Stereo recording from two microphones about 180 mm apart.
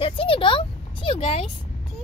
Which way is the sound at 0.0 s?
30° left (ahead or behind).